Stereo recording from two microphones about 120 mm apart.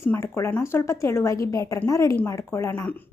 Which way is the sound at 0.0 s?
20° left (ahead or behind).